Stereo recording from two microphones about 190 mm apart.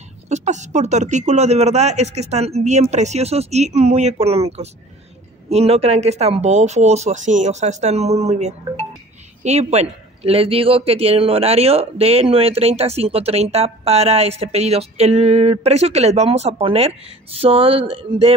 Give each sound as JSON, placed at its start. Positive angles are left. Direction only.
{"t": 0.3, "sound": "a man's voice", "side_deg": -40}